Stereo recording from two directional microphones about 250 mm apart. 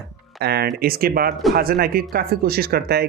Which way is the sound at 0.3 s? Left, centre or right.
Right.